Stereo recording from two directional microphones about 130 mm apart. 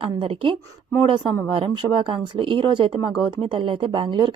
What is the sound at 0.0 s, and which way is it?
Speech, 45° right (ahead or behind).